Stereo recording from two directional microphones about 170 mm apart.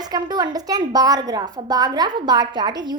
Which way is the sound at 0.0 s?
25° right (ahead or behind).